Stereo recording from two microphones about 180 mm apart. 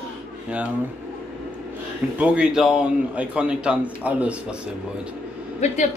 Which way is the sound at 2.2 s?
5° right (ahead or behind).